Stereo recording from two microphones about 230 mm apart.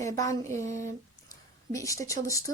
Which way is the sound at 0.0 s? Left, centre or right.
Centre.